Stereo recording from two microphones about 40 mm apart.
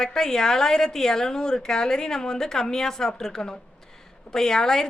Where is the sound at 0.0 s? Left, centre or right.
Centre.